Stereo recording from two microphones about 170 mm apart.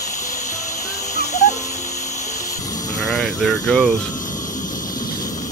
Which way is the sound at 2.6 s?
20° left (ahead or behind).